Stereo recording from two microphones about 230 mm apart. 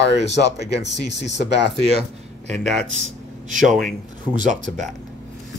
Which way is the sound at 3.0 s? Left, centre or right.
Right.